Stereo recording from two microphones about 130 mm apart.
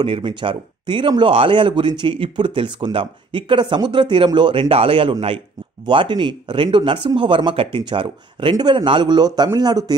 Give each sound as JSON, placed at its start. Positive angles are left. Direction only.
{"t": 0.0, "sound": "speech", "side_deg": -40}